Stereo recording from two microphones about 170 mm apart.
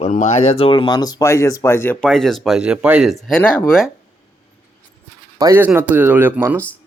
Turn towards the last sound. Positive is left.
turn(degrees=-10)  # may be behind; listen again after turning